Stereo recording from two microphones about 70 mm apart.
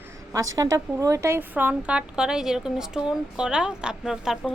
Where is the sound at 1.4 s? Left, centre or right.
Right.